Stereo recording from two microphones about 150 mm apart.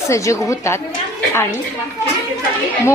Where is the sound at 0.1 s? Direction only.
20° left (ahead or behind).